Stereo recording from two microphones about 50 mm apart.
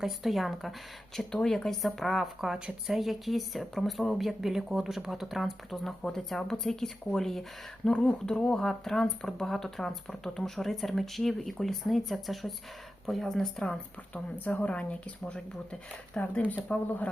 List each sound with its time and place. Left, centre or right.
0.0 s speech: centre
1.1 s speech: centre
6.0 s speech: centre
14.3 s speech: left